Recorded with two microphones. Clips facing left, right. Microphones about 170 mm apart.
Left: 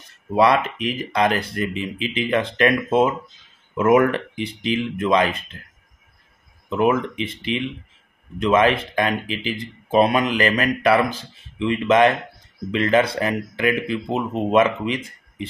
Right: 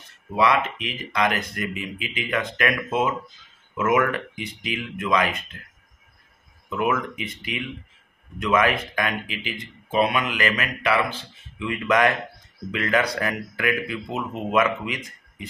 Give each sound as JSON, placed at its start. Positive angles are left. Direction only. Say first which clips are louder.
{"t": 0.4, "sound": "speech", "louder": "left 4 dB", "side_deg": 35}
{"t": 6.7, "sound": "speech", "louder": "left 5 dB", "side_deg": 30}